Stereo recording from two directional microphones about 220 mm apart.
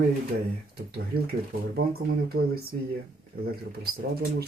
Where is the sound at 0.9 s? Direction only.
45° right (ahead or behind).